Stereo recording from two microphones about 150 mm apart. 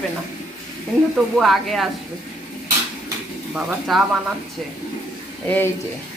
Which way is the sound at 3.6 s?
5° right (ahead or behind).